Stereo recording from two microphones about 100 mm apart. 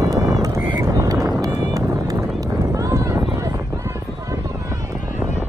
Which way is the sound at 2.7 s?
30° right (ahead or behind).